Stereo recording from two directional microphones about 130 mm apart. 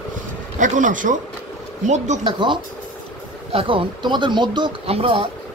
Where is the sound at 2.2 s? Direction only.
40° right (ahead or behind).